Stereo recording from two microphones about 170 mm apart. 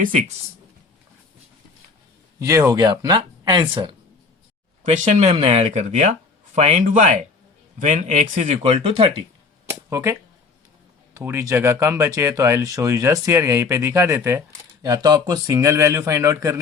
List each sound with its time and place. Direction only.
0.0 s speech: 50° right (ahead or behind)
2.4 s speech: 20° right (ahead or behind)
4.8 s speech: 45° right (ahead or behind)
9.9 s speech: 15° right (ahead or behind)
11.2 s speech: 15° right (ahead or behind)